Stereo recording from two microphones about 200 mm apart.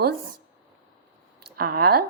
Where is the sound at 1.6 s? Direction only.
50° right (ahead or behind).